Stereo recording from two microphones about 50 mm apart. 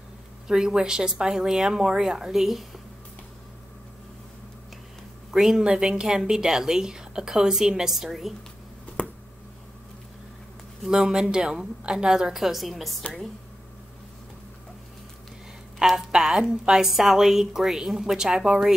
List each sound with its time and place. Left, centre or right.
0.5 s a woman's voice: centre
5.3 s a woman's voice: centre
9.0 s a sound: left
10.9 s a woman's voice: centre
16.1 s a woman's voice: centre